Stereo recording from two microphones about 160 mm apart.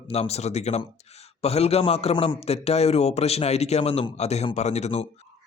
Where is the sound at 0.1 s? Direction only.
40° left (ahead or behind).